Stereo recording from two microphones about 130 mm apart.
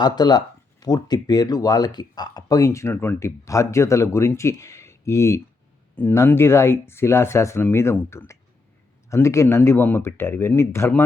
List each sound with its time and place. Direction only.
0.0 s speech: 30° left (ahead or behind)